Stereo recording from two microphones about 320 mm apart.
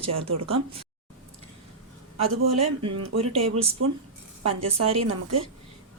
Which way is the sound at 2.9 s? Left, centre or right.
Right.